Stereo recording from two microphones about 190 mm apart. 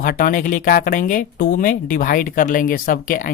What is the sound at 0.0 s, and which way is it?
Speech, 45° left (ahead or behind).